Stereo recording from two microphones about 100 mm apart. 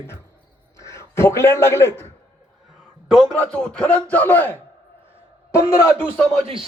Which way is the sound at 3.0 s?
5° right (ahead or behind).